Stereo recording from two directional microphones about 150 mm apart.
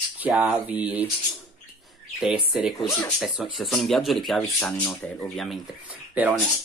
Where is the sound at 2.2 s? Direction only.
5° right (ahead or behind).